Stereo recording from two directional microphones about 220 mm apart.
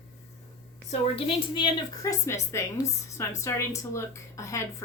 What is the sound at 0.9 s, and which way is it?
A woman's voice, 20° left (ahead or behind).